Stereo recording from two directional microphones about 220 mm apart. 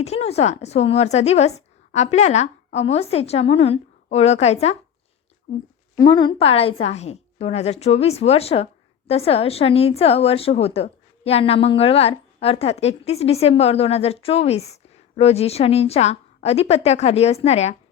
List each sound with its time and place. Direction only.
0.0 s a woman's voice: 30° left (ahead or behind)
6.0 s a woman's voice: 20° left (ahead or behind)